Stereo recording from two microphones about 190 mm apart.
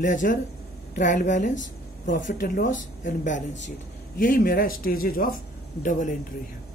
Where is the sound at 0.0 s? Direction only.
45° left (ahead or behind).